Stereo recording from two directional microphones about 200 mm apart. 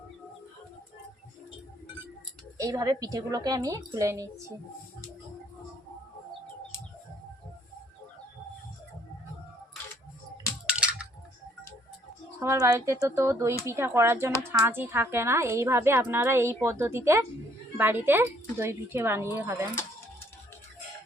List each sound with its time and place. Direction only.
2.6 s a woman's voice: 15° right (ahead or behind)
10.7 s typing: 5° right (ahead or behind)
12.4 s a woman's voice: 15° right (ahead or behind)